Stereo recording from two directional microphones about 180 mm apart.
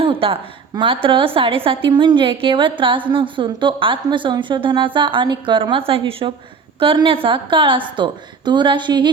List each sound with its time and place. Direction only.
0.0 s a woman's voice: 30° right (ahead or behind)